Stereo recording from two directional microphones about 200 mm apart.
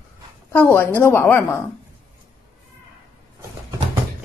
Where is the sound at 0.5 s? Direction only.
10° left (ahead or behind).